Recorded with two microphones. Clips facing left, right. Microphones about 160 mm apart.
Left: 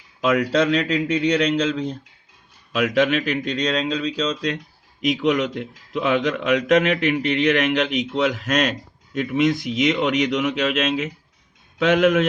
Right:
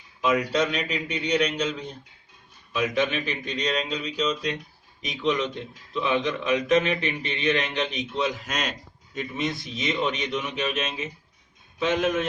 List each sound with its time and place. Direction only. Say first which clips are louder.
0.2 s a man's voice: left 4 dB; 85° left